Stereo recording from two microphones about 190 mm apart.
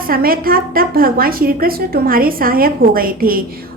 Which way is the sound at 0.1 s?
50° right (ahead or behind).